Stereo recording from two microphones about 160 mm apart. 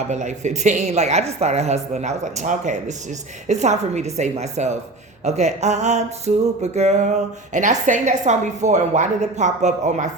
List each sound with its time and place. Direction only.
0.1 s music: 45° right (ahead or behind)